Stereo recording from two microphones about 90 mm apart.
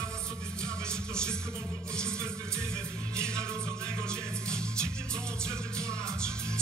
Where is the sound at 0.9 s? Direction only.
10° left (ahead or behind).